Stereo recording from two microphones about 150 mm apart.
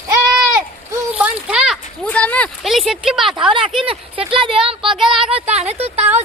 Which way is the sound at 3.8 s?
35° right (ahead or behind).